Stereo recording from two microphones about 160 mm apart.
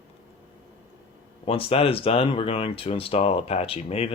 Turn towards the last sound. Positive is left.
turn(degrees=40)  # may be behind; listen again after turning